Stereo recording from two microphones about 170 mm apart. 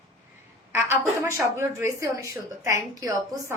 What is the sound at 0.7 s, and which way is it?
A woman's voice, 15° right (ahead or behind).